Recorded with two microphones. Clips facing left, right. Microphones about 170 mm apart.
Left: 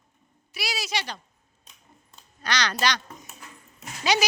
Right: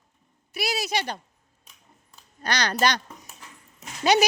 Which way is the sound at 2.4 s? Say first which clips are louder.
Right 2 dB; 50° right (ahead or behind).